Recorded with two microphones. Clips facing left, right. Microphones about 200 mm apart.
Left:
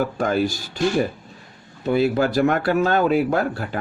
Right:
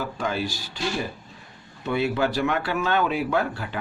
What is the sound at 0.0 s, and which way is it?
Speech, 50° left (ahead or behind).